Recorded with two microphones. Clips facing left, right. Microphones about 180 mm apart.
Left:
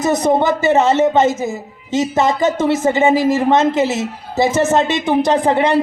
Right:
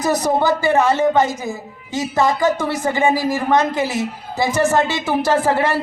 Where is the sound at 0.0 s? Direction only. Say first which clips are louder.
Left 3 dB; 20° left (ahead or behind).